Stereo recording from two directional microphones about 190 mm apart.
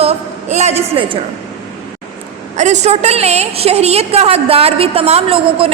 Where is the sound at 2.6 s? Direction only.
35° right (ahead or behind).